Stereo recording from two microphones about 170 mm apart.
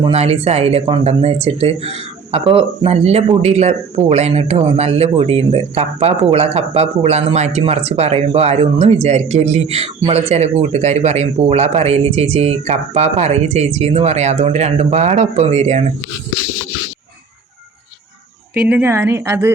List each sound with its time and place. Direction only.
0.0 s speech: 35° right (ahead or behind)
18.5 s a woman's voice: 10° right (ahead or behind)